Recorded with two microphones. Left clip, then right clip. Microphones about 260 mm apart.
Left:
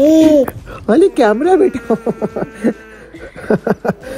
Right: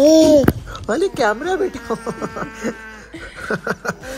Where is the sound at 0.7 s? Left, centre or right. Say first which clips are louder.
Left 8 dB; left.